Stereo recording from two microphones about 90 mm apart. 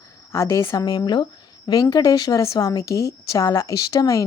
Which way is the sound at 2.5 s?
40° left (ahead or behind).